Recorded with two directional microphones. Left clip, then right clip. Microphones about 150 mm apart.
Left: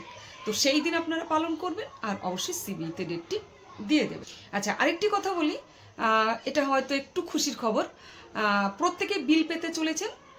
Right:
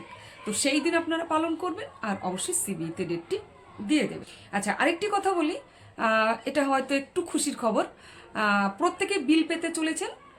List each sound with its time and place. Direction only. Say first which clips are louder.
0.5 s speech: even; 15° right (ahead or behind)
4.5 s speech: right 1 dB; 15° right (ahead or behind)